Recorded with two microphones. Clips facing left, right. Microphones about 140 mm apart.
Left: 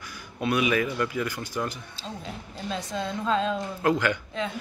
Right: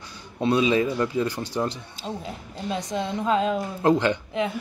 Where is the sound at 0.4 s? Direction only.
25° right (ahead or behind).